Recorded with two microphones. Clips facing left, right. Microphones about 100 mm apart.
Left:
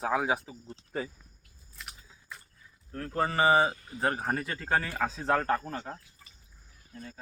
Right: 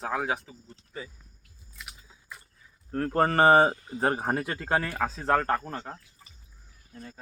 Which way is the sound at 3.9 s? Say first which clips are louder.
Right 3 dB; 30° right (ahead or behind).